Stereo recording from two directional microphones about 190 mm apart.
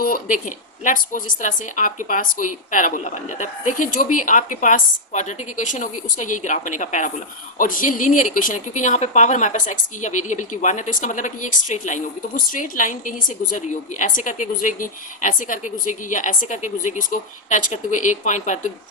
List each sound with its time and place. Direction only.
0.0 s a woman's voice: 45° left (ahead or behind)